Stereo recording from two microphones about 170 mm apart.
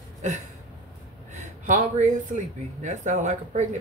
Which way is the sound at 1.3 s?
45° right (ahead or behind).